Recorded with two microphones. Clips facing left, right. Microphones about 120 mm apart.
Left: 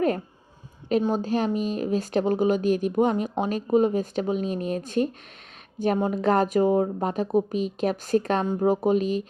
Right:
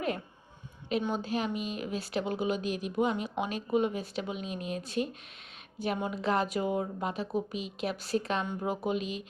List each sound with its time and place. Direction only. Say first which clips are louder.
0.9 s speech: left 8 dB; 40° left (ahead or behind)